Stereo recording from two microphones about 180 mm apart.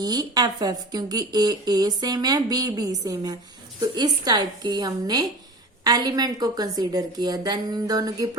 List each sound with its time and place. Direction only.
0.0 s a woman's voice: 20° right (ahead or behind)